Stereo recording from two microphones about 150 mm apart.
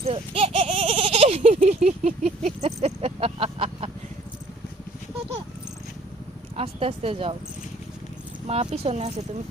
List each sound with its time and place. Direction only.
0.0 s a sound: 40° right (ahead or behind)
6.6 s speech: 40° right (ahead or behind)
8.4 s speech: 45° right (ahead or behind)